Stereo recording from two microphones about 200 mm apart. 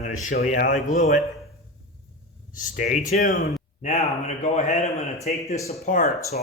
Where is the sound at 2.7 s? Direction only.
40° left (ahead or behind).